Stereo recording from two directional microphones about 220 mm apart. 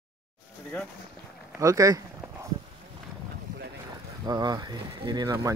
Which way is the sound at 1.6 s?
15° right (ahead or behind).